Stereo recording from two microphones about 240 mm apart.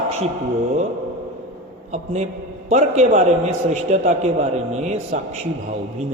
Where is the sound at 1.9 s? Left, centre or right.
Right.